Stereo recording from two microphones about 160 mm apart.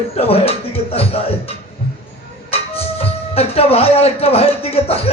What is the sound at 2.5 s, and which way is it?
Speech, 40° left (ahead or behind).